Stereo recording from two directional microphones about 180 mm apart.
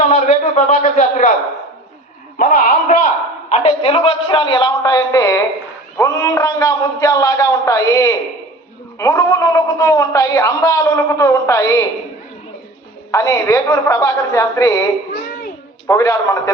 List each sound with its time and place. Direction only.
0.0 s a man's voice: 40° left (ahead or behind)
2.4 s a man's voice: 50° left (ahead or behind); by 11.9 s 15° left (ahead or behind)
13.1 s a man's voice: 15° left (ahead or behind)
15.9 s a man's voice: 15° left (ahead or behind)